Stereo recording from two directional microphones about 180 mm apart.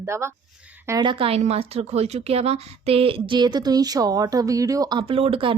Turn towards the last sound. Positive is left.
turn(degrees=-30)  # may be behind; listen again after turning